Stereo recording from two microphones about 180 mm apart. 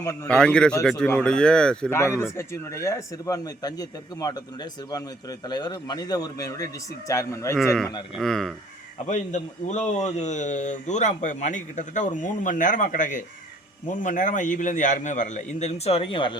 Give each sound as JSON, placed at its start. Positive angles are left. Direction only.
{"t": 0.3, "sound": "a man's voice", "side_deg": 5}
{"t": 8.1, "sound": "speech", "side_deg": 0}
{"t": 9.0, "sound": "a man's voice", "side_deg": 40}